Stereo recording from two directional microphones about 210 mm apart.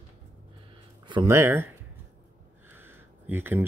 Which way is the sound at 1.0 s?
15° right (ahead or behind).